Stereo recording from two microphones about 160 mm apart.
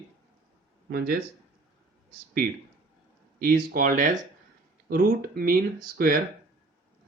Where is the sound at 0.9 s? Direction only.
70° right (ahead or behind).